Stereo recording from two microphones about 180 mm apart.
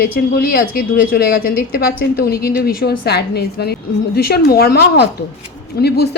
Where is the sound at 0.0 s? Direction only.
55° left (ahead or behind).